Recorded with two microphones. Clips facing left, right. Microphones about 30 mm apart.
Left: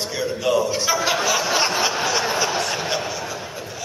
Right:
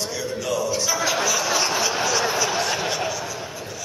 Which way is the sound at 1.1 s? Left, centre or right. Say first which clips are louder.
Left 2 dB; centre.